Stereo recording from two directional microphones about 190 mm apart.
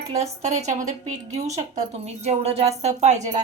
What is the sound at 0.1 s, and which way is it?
Speech, 35° right (ahead or behind).